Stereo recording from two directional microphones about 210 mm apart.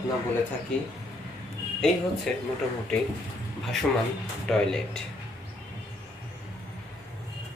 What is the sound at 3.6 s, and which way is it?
Speech, centre (ahead or behind).